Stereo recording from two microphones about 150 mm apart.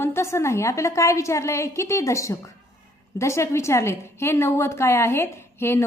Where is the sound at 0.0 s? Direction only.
15° left (ahead or behind).